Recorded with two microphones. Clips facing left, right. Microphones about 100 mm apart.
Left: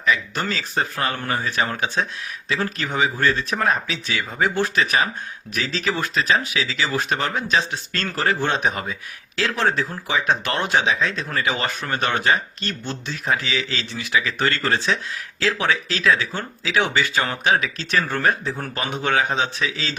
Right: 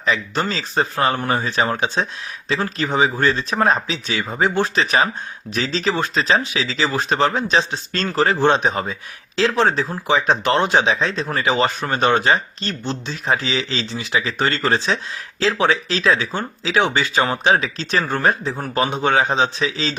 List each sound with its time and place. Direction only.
0.0 s speech: 30° right (ahead or behind)